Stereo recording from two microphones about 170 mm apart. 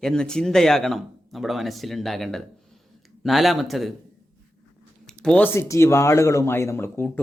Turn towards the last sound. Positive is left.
turn(degrees=10)  # may be behind; listen again after turning